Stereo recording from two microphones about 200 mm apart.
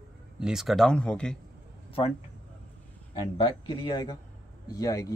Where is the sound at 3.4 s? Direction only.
20° left (ahead or behind).